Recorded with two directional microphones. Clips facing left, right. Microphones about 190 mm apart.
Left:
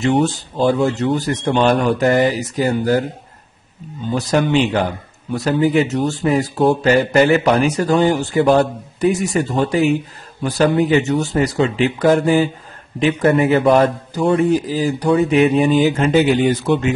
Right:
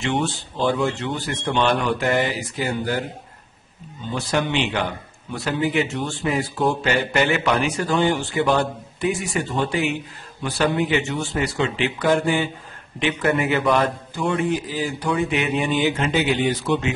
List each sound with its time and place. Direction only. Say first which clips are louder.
0.0 s a man's voice: left 7 dB; 40° left (ahead or behind)
4.1 s a man's voice: left 7 dB; 40° left (ahead or behind)